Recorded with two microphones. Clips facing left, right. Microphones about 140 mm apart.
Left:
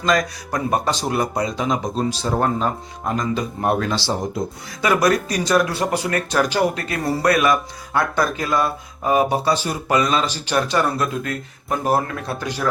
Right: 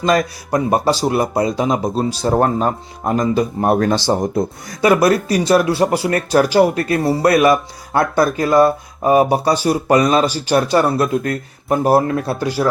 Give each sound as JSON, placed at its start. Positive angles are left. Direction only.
{"t": 0.1, "sound": "speech", "side_deg": -30}
{"t": 3.8, "sound": "speech", "side_deg": -50}
{"t": 4.8, "sound": "speech", "side_deg": -30}